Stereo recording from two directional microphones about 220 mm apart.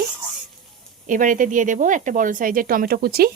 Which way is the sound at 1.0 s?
35° right (ahead or behind).